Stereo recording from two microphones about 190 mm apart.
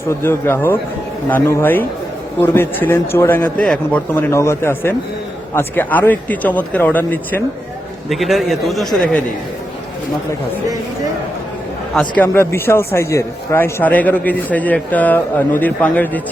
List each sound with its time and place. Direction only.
0.1 s a man's voice: 10° left (ahead or behind)
11.9 s speech: 10° left (ahead or behind)